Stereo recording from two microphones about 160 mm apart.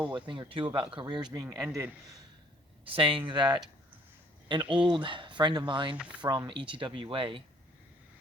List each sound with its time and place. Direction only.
0.3 s a man's voice: 35° right (ahead or behind); by 2.0 s 15° right (ahead or behind)
2.9 s speech: 35° right (ahead or behind)